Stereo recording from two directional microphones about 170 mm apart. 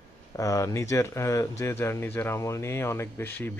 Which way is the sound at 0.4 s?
20° left (ahead or behind).